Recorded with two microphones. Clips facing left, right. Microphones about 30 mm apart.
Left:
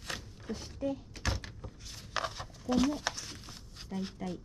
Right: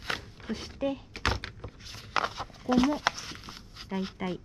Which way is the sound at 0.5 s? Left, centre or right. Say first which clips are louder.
Right 4 dB; right.